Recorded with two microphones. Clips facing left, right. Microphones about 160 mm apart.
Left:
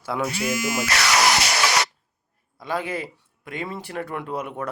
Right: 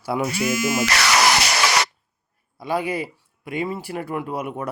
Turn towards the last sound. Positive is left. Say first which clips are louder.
# right 2 dB
turn(degrees=-10)  # may be behind; listen again after turning